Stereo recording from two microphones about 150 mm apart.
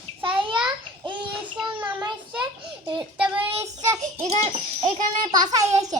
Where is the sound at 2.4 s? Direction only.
30° right (ahead or behind).